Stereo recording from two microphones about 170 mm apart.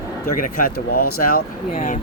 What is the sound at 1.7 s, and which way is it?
Speech, 40° left (ahead or behind).